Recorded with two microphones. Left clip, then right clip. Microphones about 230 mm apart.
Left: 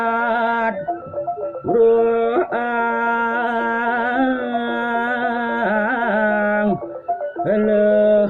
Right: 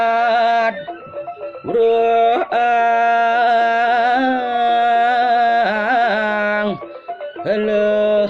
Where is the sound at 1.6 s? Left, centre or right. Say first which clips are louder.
Left 1 dB; right.